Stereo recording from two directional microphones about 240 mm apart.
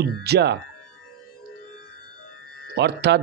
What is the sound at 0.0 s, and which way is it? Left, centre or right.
Speech, right.